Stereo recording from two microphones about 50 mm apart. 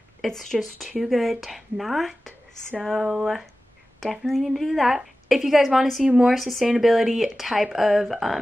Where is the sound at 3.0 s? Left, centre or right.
Centre.